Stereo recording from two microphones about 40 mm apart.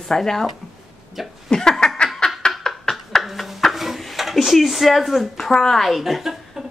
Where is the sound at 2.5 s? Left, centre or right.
Centre.